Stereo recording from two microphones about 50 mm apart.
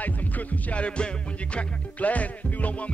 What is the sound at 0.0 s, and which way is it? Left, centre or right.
Music, left.